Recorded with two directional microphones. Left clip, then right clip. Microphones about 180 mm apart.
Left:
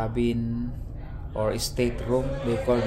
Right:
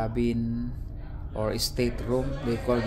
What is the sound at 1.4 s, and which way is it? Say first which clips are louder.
Speech: left 2 dB; 5° right (ahead or behind).